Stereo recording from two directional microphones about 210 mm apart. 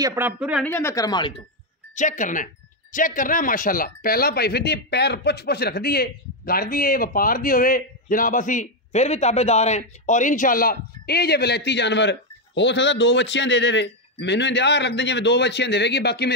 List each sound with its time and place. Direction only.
0.0 s speech: 10° right (ahead or behind)
0.7 s speech: 10° left (ahead or behind)
2.0 s a man's voice: 35° left (ahead or behind); by 16.3 s 50° left (ahead or behind)